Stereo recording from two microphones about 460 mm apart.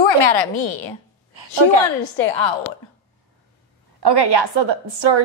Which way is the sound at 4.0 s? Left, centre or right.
Right.